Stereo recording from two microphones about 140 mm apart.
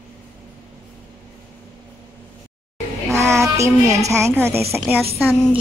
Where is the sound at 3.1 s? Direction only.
20° right (ahead or behind).